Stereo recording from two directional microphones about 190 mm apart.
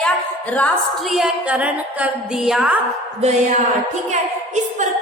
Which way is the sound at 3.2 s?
35° right (ahead or behind).